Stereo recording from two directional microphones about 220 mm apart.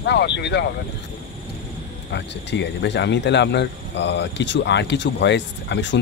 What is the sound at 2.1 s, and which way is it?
Speech, 50° left (ahead or behind).